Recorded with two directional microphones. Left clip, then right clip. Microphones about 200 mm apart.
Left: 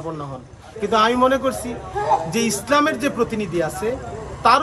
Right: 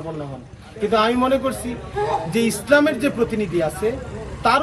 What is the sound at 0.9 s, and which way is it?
Speech, 10° left (ahead or behind).